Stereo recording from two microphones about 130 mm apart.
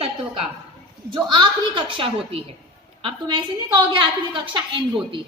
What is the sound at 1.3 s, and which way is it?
A woman's voice, 35° right (ahead or behind).